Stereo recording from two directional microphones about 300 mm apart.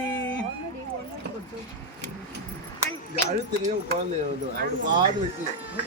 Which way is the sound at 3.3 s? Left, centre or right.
Right.